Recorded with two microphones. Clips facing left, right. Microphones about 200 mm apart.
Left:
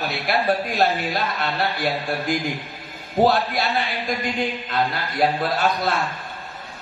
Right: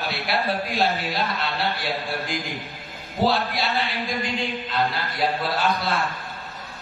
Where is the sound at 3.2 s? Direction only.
50° left (ahead or behind).